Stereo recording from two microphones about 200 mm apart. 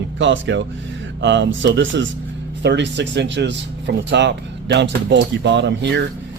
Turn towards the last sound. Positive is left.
turn(degrees=-60)  # may be behind; listen again after turning